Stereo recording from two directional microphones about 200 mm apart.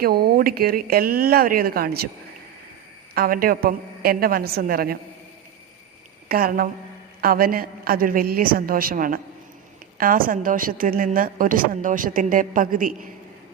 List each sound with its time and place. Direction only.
0.0 s a woman's voice: 50° right (ahead or behind)
3.2 s a woman's voice: 45° right (ahead or behind)
6.2 s a woman's voice: 50° right (ahead or behind)